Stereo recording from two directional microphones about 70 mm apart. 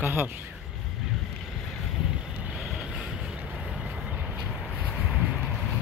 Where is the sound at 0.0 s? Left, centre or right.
Right.